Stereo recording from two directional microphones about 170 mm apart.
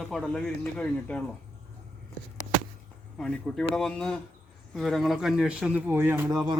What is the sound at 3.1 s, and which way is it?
A man's voice, 5° left (ahead or behind).